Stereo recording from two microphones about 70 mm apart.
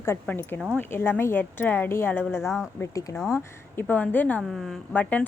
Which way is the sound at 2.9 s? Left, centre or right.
Left.